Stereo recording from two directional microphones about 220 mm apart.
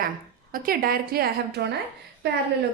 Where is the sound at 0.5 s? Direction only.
40° right (ahead or behind).